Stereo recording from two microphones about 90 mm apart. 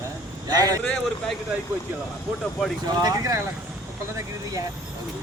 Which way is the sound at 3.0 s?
45° right (ahead or behind).